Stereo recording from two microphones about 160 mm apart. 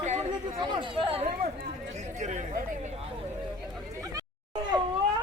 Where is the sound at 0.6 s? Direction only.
30° right (ahead or behind).